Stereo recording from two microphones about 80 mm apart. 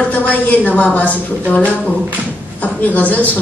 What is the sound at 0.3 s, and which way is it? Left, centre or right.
A woman's voice, centre.